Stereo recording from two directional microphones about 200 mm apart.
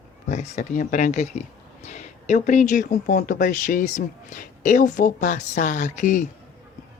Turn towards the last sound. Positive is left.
turn(degrees=40)  # may be behind; listen again after turning